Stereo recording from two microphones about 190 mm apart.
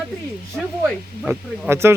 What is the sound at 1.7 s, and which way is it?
Speech, 15° right (ahead or behind).